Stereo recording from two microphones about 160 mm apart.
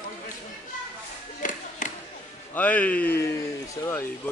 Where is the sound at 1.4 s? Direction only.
55° left (ahead or behind).